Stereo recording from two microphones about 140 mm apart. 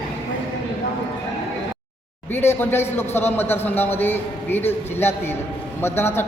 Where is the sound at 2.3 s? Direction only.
15° left (ahead or behind).